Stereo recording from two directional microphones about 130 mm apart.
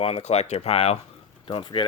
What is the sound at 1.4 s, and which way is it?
Speech, 40° left (ahead or behind).